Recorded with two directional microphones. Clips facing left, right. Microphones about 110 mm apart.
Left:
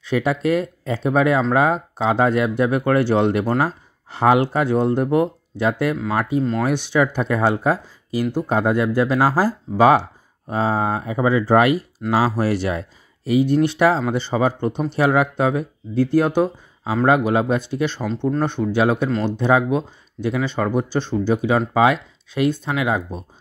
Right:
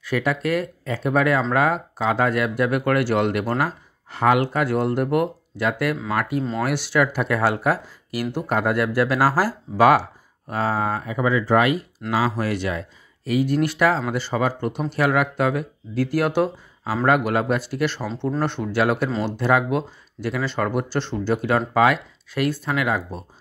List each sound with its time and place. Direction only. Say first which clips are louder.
0.0 s speech: left 3 dB; 25° left (ahead or behind)
13.4 s speech: left 3 dB; 25° left (ahead or behind)
19.0 s speech: left 3 dB; 10° right (ahead or behind)
19.3 s speech: left 2 dB; 20° left (ahead or behind)